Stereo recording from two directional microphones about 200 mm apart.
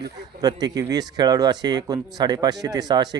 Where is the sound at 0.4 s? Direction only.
20° right (ahead or behind).